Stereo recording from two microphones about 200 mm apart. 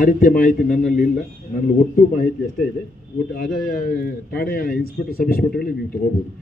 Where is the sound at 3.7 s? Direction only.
45° left (ahead or behind).